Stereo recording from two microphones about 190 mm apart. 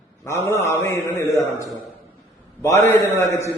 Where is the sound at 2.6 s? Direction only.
15° left (ahead or behind).